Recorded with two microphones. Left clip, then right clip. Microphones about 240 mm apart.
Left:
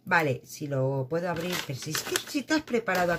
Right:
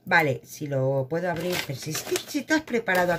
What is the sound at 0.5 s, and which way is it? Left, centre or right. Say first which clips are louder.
Speech: right 4 dB; centre.